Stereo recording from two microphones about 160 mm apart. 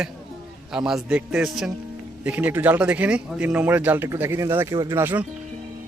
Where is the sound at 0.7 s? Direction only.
5° right (ahead or behind).